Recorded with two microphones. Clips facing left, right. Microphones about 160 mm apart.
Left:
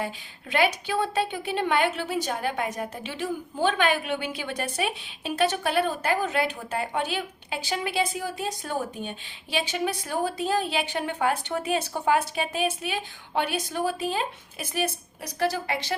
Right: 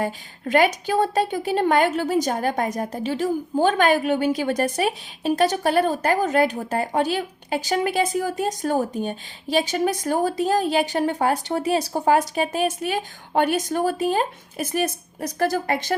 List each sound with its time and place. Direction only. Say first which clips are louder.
0.0 s a woman's voice: right 7 dB; 45° right (ahead or behind)